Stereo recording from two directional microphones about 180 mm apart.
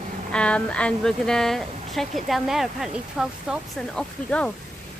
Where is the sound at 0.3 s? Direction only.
5° left (ahead or behind).